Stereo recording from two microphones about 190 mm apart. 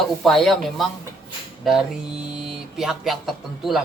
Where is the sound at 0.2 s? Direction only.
Centre (ahead or behind).